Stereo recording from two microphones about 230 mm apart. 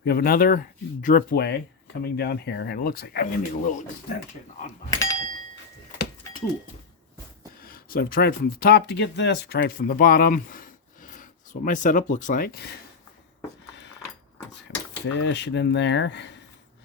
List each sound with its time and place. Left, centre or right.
0.0 s speech: left
4.9 s doorbell: centre
7.6 s speech: left
15.0 s speech: left